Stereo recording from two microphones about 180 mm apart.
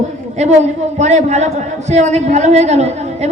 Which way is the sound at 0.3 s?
40° right (ahead or behind).